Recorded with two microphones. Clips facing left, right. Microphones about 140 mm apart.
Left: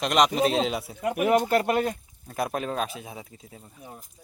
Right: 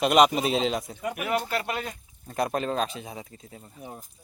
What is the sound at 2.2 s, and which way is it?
Speech, centre (ahead or behind).